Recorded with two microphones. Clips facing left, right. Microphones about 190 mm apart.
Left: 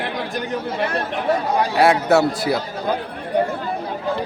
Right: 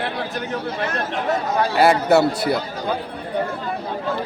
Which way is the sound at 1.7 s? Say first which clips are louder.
Even; centre (ahead or behind).